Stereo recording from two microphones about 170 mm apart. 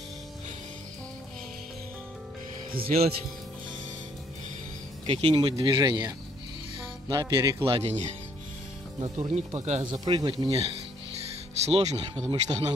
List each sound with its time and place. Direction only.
5.0 s speech: 35° right (ahead or behind)
5.3 s speech: 25° right (ahead or behind)
7.6 s speech: 30° right (ahead or behind)
9.9 s speech: 25° right (ahead or behind)
11.6 s speech: 40° right (ahead or behind)
12.3 s speech: 25° right (ahead or behind)